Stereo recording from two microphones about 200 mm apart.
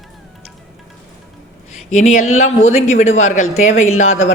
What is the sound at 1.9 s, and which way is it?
Speech, 35° left (ahead or behind).